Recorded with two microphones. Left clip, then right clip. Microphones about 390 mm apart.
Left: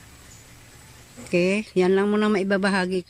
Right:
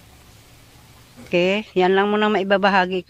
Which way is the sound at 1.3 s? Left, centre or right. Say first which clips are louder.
Right 3 dB; right.